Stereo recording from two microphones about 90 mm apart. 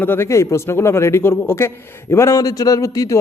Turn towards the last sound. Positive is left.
turn(degrees=35)  # may be behind; listen again after turning